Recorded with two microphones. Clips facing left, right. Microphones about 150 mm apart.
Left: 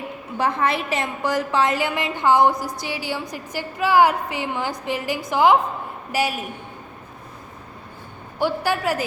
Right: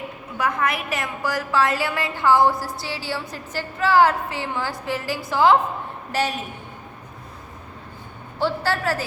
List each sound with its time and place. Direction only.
0.3 s a woman's voice: 30° left (ahead or behind); by 6.4 s 10° left (ahead or behind)
8.4 s a woman's voice: 15° left (ahead or behind)